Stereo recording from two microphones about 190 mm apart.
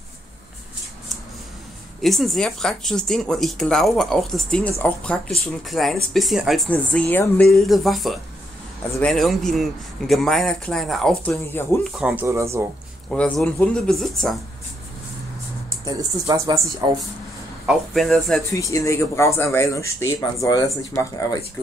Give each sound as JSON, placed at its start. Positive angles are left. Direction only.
{"t": 2.0, "sound": "speech", "side_deg": 0}
{"t": 12.0, "sound": "speech", "side_deg": -10}
{"t": 13.1, "sound": "speech", "side_deg": 5}
{"t": 15.8, "sound": "speech", "side_deg": -20}
{"t": 17.6, "sound": "speech", "side_deg": 0}
{"t": 18.4, "sound": "speech", "side_deg": 15}